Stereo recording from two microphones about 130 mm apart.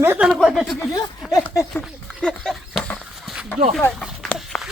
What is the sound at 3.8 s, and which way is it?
Speech, 5° left (ahead or behind).